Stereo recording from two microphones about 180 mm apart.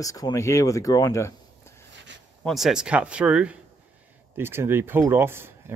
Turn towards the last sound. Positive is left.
turn(degrees=-15)  # may be behind; listen again after turning